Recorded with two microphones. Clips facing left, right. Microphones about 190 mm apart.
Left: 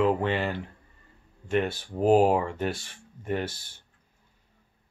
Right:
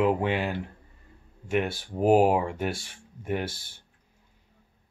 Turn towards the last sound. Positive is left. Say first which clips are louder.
# even
turn(degrees=-10)  # may be behind; listen again after turning